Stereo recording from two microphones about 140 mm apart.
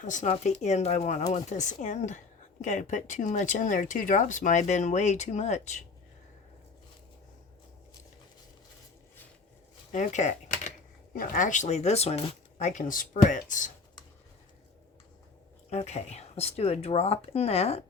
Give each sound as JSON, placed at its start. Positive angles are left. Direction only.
{"t": 0.0, "sound": "a woman's voice", "side_deg": 60}
{"t": 9.9, "sound": "typewriter", "side_deg": 60}
{"t": 11.1, "sound": "a woman's voice", "side_deg": 80}
{"t": 15.7, "sound": "speech", "side_deg": 50}